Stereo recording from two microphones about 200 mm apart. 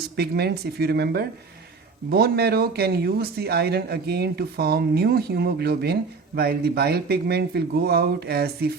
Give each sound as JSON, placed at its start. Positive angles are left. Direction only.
{"t": 0.2, "sound": "speech", "side_deg": -55}